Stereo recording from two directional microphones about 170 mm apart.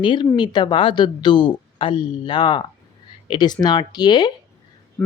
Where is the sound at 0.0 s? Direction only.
30° left (ahead or behind).